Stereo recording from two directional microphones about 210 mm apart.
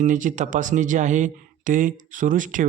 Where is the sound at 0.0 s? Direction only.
35° right (ahead or behind).